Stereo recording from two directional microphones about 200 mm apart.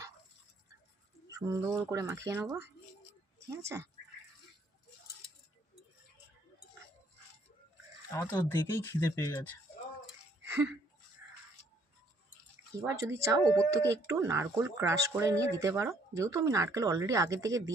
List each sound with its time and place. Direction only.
1.4 s speech: 15° right (ahead or behind)
8.1 s speech: 15° left (ahead or behind)
10.4 s a sound: 15° right (ahead or behind)
12.8 s speech: 15° right (ahead or behind)